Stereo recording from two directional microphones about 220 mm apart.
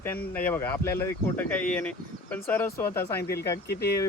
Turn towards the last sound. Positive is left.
turn(degrees=50)  # may be behind; listen again after turning